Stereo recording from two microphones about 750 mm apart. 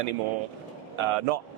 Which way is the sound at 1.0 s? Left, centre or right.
Right.